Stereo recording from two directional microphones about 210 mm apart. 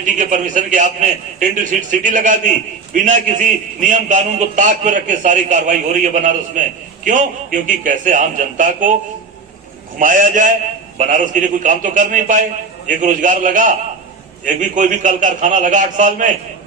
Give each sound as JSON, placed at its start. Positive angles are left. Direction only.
{"t": 0.0, "sound": "a man's voice", "side_deg": -35}
{"t": 10.0, "sound": "a man's voice", "side_deg": -40}